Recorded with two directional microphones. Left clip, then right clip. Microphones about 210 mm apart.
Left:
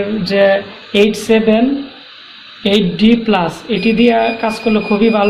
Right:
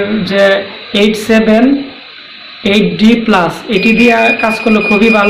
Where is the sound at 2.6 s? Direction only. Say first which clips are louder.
Right 3 dB; 50° left (ahead or behind).